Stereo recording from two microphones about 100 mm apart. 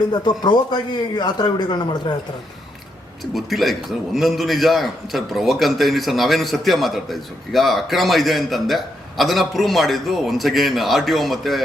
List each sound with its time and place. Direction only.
0.1 s a man's voice: 45° left (ahead or behind)
3.3 s a man's voice: centre (ahead or behind)